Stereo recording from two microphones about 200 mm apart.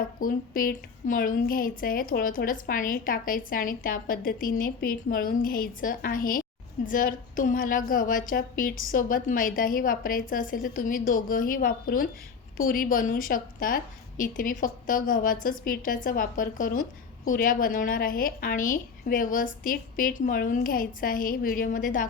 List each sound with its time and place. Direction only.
0.2 s a woman's voice: 45° left (ahead or behind)